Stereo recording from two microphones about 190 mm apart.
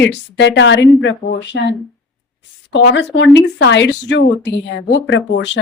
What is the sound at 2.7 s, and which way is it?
Speech, 65° left (ahead or behind).